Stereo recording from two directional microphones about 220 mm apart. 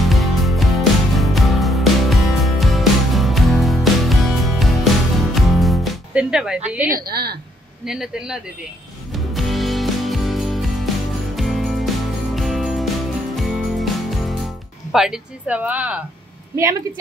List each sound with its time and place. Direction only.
0.1 s music: centre (ahead or behind)
6.9 s a woman's voice: 45° right (ahead or behind)
7.8 s a man's voice: centre (ahead or behind)
9.1 s music: centre (ahead or behind)